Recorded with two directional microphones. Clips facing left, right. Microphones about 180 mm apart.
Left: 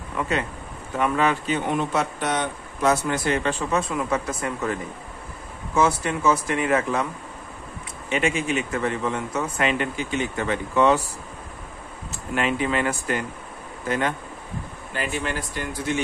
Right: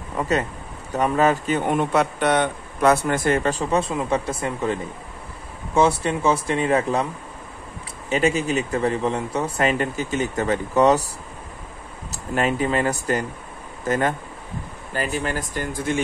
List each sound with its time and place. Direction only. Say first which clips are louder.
0.1 s speech: right 3 dB; 40° right (ahead or behind)
5.8 s speech: right 3 dB; 30° right (ahead or behind)
8.1 s speech: right 3 dB; 40° right (ahead or behind)
12.1 s speech: right 2 dB; 40° right (ahead or behind)